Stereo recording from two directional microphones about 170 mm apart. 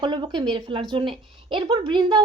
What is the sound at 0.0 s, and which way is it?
A woman's voice, 25° right (ahead or behind).